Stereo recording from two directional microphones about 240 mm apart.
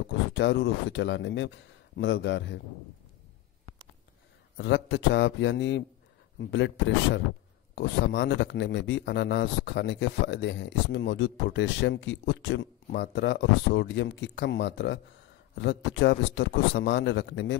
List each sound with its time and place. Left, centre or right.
0.3 s a man's voice: left
4.6 s a man's voice: left